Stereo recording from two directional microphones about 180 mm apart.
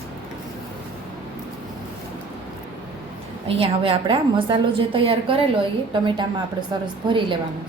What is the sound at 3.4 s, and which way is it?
A woman's voice, 30° right (ahead or behind).